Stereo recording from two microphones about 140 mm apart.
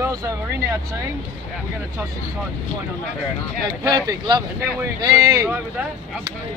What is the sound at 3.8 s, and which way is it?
Speech, 25° right (ahead or behind).